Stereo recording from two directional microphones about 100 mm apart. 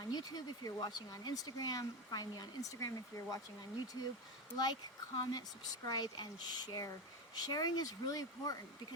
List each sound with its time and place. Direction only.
0.1 s speech: 40° left (ahead or behind)
4.5 s speech: 45° left (ahead or behind)